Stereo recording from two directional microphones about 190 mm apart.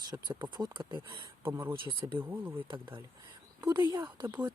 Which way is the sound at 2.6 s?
25° right (ahead or behind).